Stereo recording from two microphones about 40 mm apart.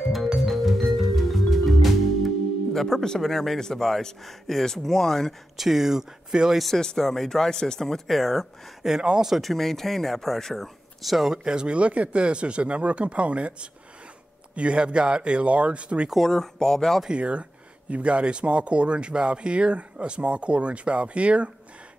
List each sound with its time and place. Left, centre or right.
0.5 s music: centre
3.2 s speech: centre
5.6 s speech: centre
6.8 s speech: centre
7.8 s speech: centre
8.8 s speech: centre
9.3 s speech: centre
11.4 s speech: right
16.2 s speech: centre
17.1 s speech: right